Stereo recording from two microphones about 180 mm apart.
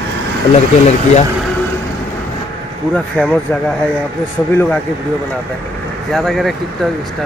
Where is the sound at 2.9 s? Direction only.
5° left (ahead or behind).